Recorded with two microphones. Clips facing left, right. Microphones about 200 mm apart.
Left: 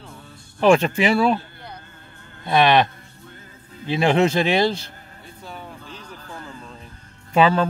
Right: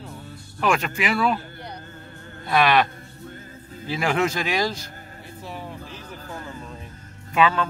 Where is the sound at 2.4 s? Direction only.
25° left (ahead or behind).